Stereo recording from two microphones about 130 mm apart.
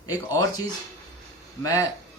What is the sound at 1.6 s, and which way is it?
Speech, 30° left (ahead or behind).